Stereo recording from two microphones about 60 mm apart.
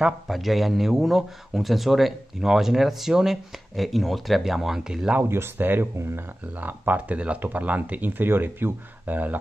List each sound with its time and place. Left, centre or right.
0.3 s a man's voice: centre
5.3 s speech: right
6.6 s speech: right